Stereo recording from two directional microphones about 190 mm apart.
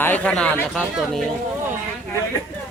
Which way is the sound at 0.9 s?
Centre (ahead or behind).